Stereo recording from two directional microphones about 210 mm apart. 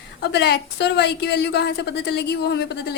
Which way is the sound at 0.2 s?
55° left (ahead or behind).